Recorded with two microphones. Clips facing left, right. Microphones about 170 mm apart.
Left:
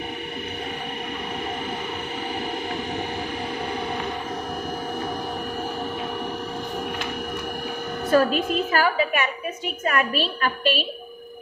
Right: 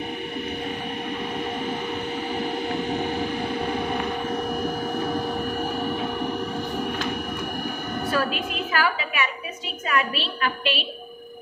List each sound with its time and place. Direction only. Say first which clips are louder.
8.1 s a woman's voice: left 8 dB; 40° left (ahead or behind)